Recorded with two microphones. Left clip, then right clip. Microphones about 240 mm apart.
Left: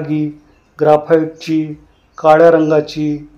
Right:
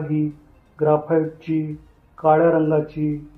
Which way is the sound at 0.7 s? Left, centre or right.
Left.